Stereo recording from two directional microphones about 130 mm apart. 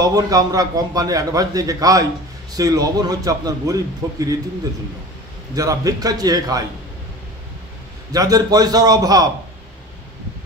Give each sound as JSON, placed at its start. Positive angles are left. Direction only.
{"t": 0.0, "sound": "a man's voice", "side_deg": -30}
{"t": 5.5, "sound": "a man's voice", "side_deg": -25}
{"t": 8.1, "sound": "a man's voice", "side_deg": -30}